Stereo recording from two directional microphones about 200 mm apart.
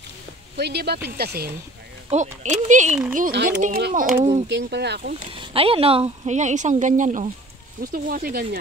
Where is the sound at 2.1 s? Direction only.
35° right (ahead or behind).